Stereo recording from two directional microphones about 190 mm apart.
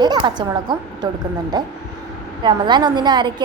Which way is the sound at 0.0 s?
25° right (ahead or behind).